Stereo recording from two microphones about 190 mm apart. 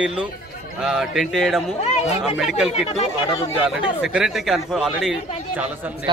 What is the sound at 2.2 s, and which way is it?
Speech, centre (ahead or behind).